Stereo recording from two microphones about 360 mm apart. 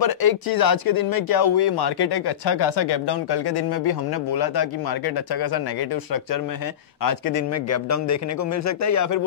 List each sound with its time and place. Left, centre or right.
0.0 s speech: left
7.0 s speech: left
7.5 s a man's voice: left